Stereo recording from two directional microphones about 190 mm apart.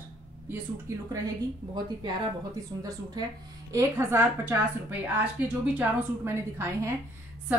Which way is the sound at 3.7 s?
15° right (ahead or behind).